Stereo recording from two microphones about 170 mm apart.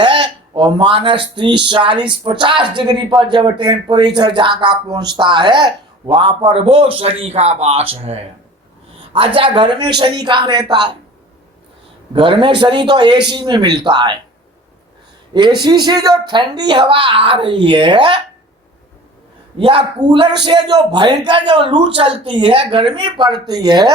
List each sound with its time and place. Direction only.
0.0 s a man's voice: 30° right (ahead or behind)
12.1 s speech: 30° right (ahead or behind)
15.3 s a man's voice: 25° right (ahead or behind)
19.5 s speech: 30° right (ahead or behind)